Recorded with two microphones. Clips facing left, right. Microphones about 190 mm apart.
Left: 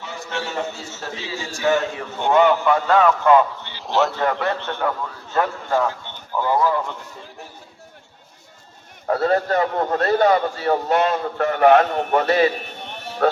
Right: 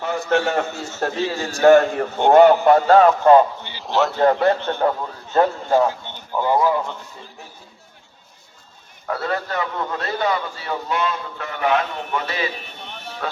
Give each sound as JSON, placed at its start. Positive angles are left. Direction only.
{"t": 0.0, "sound": "a man's voice", "side_deg": -55}
{"t": 2.1, "sound": "a man's voice", "side_deg": -40}
{"t": 3.6, "sound": "speech", "side_deg": -5}
{"t": 4.2, "sound": "a man's voice", "side_deg": -35}
{"t": 9.0, "sound": "a man's voice", "side_deg": 40}